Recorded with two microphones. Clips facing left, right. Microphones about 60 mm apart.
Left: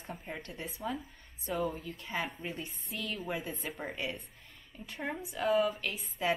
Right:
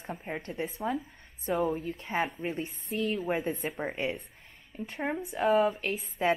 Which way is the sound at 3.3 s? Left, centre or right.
Right.